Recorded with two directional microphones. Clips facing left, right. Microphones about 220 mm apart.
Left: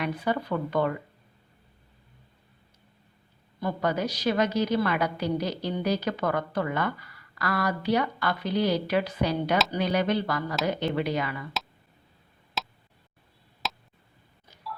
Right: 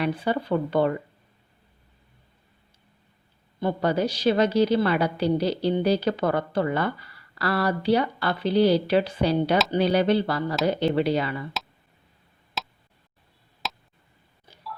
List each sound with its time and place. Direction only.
0.0 s speech: 30° right (ahead or behind)
3.6 s a woman's voice: 30° right (ahead or behind)
12.6 s a sound: centre (ahead or behind)